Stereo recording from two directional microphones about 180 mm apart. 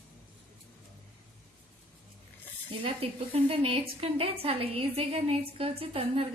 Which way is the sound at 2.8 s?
30° right (ahead or behind).